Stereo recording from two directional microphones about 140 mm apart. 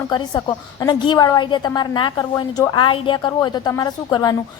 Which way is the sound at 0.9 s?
30° left (ahead or behind).